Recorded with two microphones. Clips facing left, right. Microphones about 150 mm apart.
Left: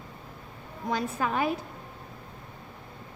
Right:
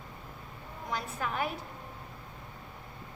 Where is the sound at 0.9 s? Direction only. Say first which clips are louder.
Left 6 dB; 90° left.